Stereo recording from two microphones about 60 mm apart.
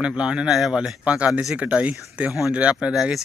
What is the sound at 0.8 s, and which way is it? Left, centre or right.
Speech, centre.